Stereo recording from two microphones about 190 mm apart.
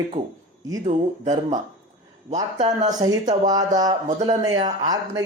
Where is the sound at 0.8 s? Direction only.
40° right (ahead or behind).